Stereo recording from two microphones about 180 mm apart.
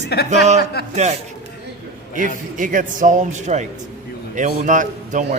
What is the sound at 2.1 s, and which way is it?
A man's voice, 50° right (ahead or behind).